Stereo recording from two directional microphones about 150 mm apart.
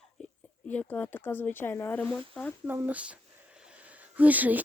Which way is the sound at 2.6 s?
10° right (ahead or behind).